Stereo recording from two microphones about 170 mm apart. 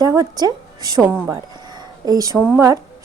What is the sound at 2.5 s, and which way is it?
Speech, 20° right (ahead or behind).